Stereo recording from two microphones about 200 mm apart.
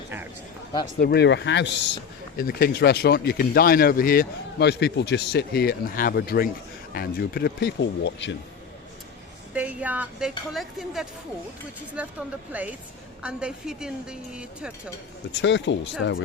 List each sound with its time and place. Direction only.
0.9 s speech: 50° left (ahead or behind)
2.4 s speech: 50° left (ahead or behind)
9.5 s a woman's voice: 5° right (ahead or behind)
15.3 s speech: 65° left (ahead or behind)